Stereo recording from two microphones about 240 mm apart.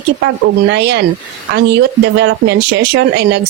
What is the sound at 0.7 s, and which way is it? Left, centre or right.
Speech, right.